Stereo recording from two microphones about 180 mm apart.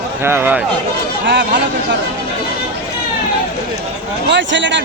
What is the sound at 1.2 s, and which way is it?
Speech, 75° right (ahead or behind).